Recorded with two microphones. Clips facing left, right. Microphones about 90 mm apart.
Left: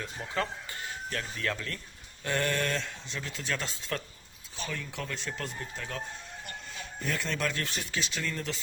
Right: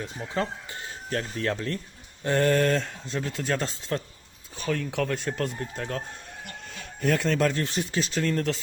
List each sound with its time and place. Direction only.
0.0 s speech: 25° right (ahead or behind); by 3.8 s 40° right (ahead or behind)
3.8 s speech: 25° right (ahead or behind)
4.5 s speech: 55° right (ahead or behind)
5.5 s speech: 45° right (ahead or behind)
7.5 s speech: 25° right (ahead or behind)
7.9 s speech: 40° right (ahead or behind)